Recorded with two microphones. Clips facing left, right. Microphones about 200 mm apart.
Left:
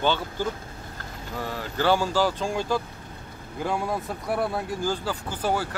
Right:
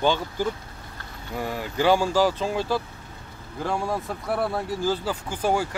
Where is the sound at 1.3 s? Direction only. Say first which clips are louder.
Right 3 dB; 10° right (ahead or behind).